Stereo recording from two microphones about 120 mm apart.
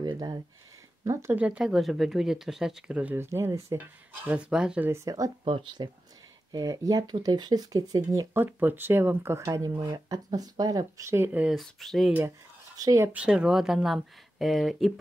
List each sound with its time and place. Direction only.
0.0 s a sound: 40° right (ahead or behind)
1.0 s speech: 25° right (ahead or behind)
1.3 s speech: 10° right (ahead or behind)
4.3 s speech: 10° right (ahead or behind)
4.8 s speech: 25° right (ahead or behind)
5.4 s speech: 45° right (ahead or behind); by 11.5 s 15° right (ahead or behind)
11.5 s speech: centre (ahead or behind)
12.7 s speech: 30° right (ahead or behind)
13.1 s speech: 10° right (ahead or behind)